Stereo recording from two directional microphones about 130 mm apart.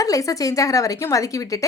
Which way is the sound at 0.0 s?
25° left (ahead or behind).